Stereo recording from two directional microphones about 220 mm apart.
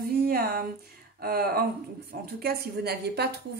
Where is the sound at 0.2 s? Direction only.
45° right (ahead or behind).